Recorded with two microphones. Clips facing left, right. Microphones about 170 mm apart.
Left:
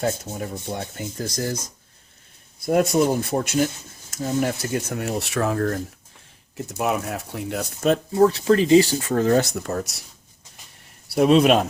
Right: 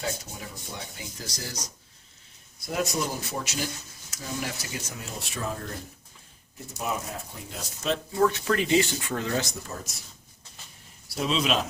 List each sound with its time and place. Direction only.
0.0 s speech: 50° left (ahead or behind); by 5.8 s 70° left (ahead or behind)
6.8 s speech: 75° left (ahead or behind); by 7.9 s 55° left (ahead or behind)
8.1 s speech: 30° left (ahead or behind)
9.6 s speech: 70° left (ahead or behind)
11.1 s speech: 55° left (ahead or behind)